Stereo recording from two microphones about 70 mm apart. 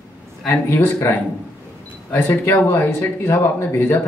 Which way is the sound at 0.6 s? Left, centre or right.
Left.